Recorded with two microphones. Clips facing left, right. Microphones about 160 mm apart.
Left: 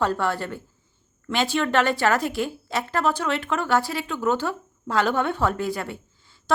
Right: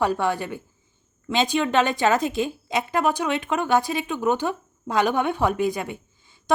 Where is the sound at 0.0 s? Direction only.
15° right (ahead or behind).